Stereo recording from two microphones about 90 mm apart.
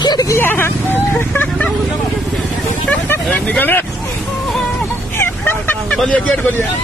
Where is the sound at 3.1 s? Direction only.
20° left (ahead or behind).